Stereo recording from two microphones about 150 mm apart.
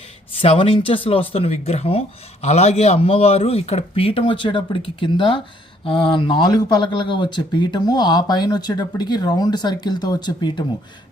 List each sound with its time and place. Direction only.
0.4 s speech: 40° left (ahead or behind)